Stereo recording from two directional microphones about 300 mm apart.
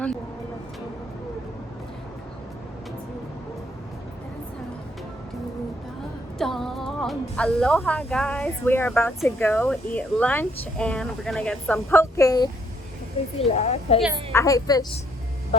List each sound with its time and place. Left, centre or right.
6.4 s a woman's voice: centre